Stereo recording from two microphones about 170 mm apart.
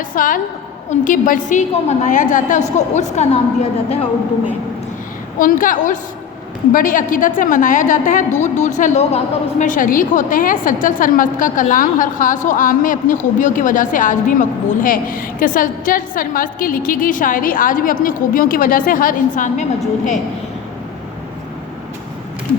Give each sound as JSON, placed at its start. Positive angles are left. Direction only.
{"t": 0.1, "sound": "a woman's voice", "side_deg": 55}
{"t": 5.4, "sound": "a woman's voice", "side_deg": 55}